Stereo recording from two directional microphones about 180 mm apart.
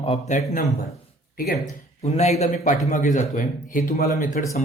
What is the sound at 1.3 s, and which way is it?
Speech, 55° left (ahead or behind).